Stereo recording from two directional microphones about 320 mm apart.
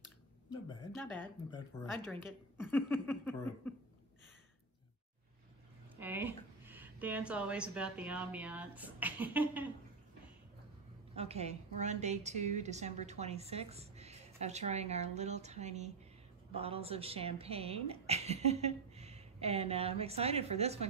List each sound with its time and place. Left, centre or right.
0.5 s speech: centre
5.9 s speech: centre
11.1 s a woman's voice: centre